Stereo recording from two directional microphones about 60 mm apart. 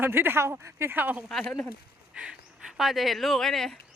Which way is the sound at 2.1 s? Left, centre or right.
Centre.